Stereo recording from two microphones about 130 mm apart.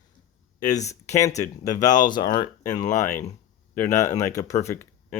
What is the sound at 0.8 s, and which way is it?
Speech, 60° left (ahead or behind).